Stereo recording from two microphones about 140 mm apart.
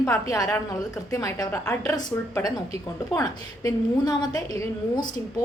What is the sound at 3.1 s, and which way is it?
A woman's voice, 25° left (ahead or behind).